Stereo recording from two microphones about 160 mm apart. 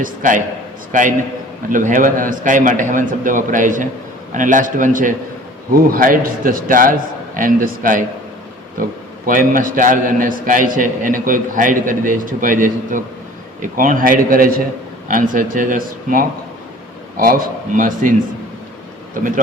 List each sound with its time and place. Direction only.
0.0 s a man's voice: 55° right (ahead or behind)
9.2 s a man's voice: 60° right (ahead or behind)